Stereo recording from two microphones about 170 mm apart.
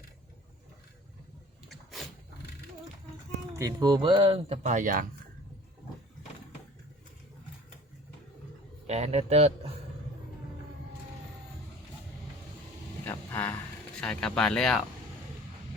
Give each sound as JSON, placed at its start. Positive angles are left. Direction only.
{"t": 1.7, "sound": "a sound", "side_deg": 0}
{"t": 3.5, "sound": "speech", "side_deg": -20}
{"t": 8.9, "sound": "a man's voice", "side_deg": -40}
{"t": 13.1, "sound": "vehicle", "side_deg": 10}
{"t": 14.0, "sound": "speech", "side_deg": 5}